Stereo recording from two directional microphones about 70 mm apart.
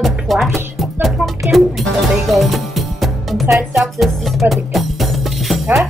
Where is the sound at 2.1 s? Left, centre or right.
Centre.